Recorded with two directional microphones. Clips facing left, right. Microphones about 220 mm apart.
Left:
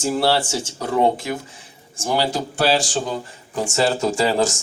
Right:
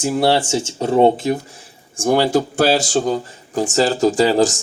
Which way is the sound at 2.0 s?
50° right (ahead or behind).